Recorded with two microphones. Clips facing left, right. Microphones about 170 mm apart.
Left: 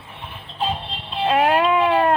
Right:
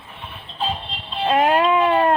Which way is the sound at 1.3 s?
10° left (ahead or behind).